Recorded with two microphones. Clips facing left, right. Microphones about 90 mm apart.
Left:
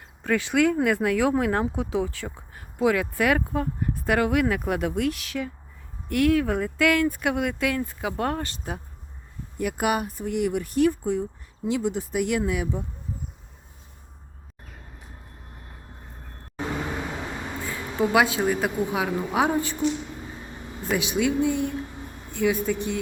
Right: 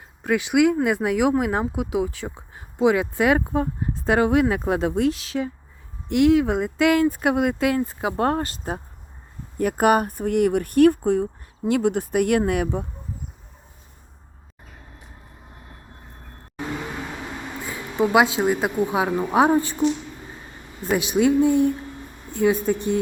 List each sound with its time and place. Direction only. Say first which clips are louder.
0.2 s speech: right 3 dB; 15° right (ahead or behind); by 12.8 s 55° right (ahead or behind)
17.7 s speech: right 3 dB; 20° right (ahead or behind)
20.9 s speech: right 5 dB; 35° right (ahead or behind)